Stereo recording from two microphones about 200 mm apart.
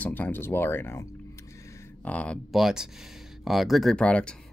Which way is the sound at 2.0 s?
5° left (ahead or behind).